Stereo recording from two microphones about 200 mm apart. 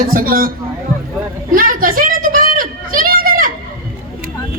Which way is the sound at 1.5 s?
45° right (ahead or behind).